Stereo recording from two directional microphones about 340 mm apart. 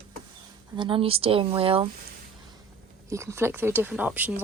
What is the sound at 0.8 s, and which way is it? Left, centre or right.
Speech, centre.